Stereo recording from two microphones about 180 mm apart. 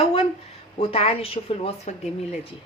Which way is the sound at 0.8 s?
30° left (ahead or behind).